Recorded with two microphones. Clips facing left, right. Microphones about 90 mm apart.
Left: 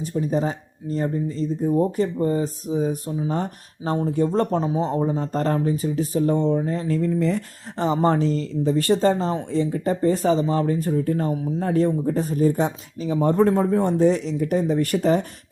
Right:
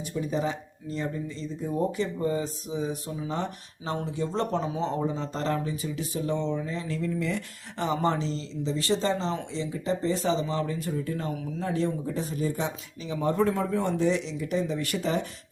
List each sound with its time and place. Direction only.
0.0 s speech: 40° left (ahead or behind)